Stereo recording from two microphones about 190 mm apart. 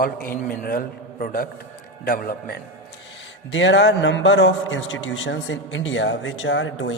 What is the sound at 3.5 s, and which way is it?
A man's voice, 75° left (ahead or behind).